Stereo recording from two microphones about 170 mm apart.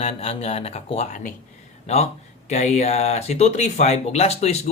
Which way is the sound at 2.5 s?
40° left (ahead or behind).